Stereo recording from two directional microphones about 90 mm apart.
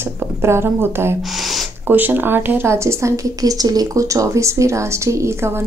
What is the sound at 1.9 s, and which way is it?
Speech, 20° right (ahead or behind).